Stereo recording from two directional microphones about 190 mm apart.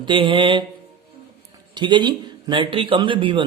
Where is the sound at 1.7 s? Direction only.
25° right (ahead or behind).